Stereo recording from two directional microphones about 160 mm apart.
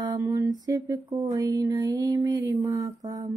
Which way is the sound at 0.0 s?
20° right (ahead or behind).